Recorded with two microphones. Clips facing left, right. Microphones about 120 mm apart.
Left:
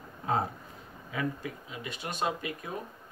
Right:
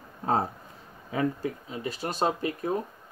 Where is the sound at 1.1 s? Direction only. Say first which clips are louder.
Right 6 dB; 35° right (ahead or behind).